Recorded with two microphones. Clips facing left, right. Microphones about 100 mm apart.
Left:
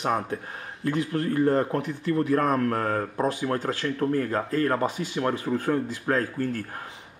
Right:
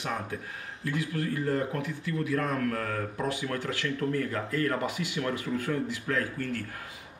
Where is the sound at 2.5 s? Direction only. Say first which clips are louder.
Left 6 dB; 35° left (ahead or behind).